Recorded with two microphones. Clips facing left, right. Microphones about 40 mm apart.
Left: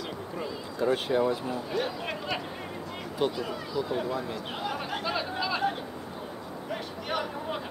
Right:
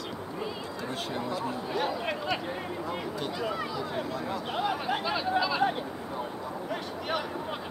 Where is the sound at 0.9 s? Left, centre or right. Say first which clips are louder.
Left 5 dB; centre.